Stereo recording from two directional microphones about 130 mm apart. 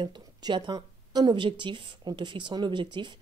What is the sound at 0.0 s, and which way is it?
A woman's voice, 35° right (ahead or behind).